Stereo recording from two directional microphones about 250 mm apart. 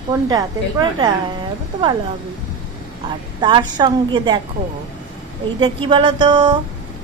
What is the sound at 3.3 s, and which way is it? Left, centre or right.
A woman's voice, centre.